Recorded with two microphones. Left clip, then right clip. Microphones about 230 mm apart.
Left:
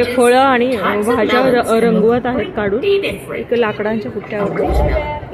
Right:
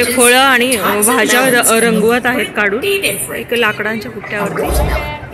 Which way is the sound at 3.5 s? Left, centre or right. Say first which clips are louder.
Right 2 dB; centre.